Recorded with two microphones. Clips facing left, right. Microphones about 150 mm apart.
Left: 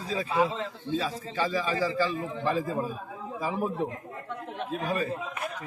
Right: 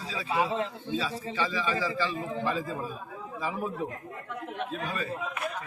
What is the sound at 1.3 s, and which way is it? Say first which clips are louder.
A man's voice: left 3 dB; 45° left (ahead or behind).